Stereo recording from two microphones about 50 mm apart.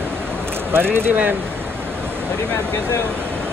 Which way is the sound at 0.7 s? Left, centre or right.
Right.